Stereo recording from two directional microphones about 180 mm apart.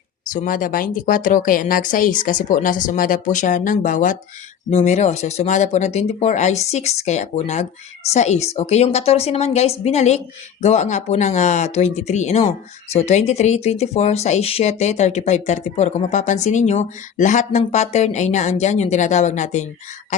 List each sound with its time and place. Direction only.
0.3 s speech: 50° left (ahead or behind)